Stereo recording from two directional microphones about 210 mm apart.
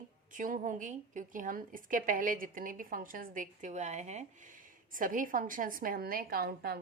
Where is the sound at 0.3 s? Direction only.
40° right (ahead or behind).